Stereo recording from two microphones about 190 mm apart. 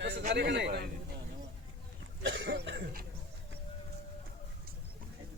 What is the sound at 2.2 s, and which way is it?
Speech, 75° right (ahead or behind).